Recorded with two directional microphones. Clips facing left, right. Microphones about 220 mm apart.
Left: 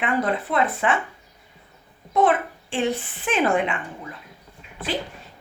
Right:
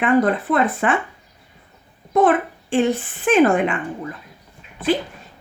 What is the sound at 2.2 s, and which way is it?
A child's voice, 50° right (ahead or behind).